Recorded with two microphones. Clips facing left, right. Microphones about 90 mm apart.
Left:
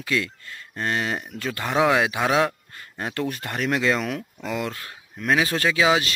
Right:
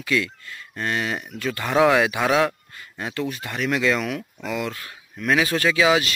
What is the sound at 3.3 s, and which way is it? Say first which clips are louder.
Speech: even; 45° left (ahead or behind).